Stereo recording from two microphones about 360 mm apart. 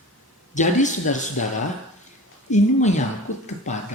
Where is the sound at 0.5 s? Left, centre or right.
Centre.